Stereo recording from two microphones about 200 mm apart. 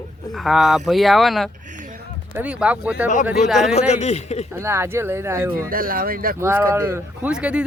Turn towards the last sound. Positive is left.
turn(degrees=-5)  # may be behind; listen again after turning